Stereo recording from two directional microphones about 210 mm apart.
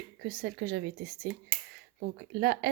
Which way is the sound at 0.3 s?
45° right (ahead or behind).